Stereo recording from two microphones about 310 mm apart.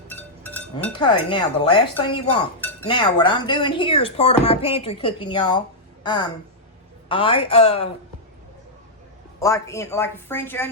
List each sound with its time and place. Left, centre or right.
0.1 s speech: centre
9.4 s speech: centre